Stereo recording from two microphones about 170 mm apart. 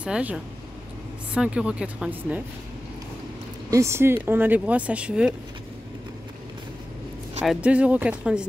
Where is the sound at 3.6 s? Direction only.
15° right (ahead or behind).